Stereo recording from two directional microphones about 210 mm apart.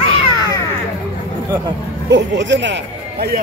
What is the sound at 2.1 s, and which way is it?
Speech, 60° right (ahead or behind).